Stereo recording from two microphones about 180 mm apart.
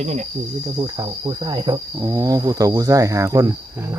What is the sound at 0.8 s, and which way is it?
Cricket, 20° right (ahead or behind).